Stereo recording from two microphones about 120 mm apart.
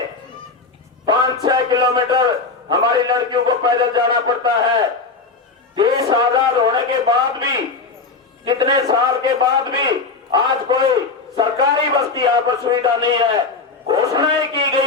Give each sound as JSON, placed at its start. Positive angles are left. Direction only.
{"t": 1.0, "sound": "a sound", "side_deg": -40}
{"t": 2.6, "sound": "a man's voice", "side_deg": -40}
{"t": 5.7, "sound": "a man's voice", "side_deg": -35}